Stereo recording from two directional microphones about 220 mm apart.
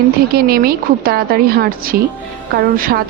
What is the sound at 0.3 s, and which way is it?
Speech, 40° right (ahead or behind).